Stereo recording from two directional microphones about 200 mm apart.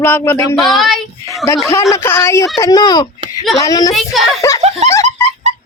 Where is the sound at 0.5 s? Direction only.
Centre (ahead or behind).